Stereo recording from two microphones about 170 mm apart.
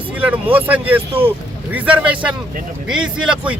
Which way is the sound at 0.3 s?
10° right (ahead or behind).